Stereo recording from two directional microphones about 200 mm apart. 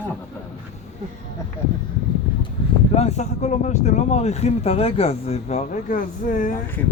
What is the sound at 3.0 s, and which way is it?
Speech, 35° left (ahead or behind).